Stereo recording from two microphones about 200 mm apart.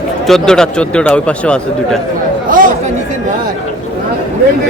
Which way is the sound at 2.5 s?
40° right (ahead or behind).